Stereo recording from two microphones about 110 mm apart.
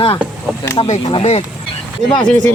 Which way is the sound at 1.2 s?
65° left (ahead or behind).